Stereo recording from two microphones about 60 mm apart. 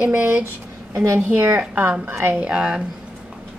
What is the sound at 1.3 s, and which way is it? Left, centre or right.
Speech, right.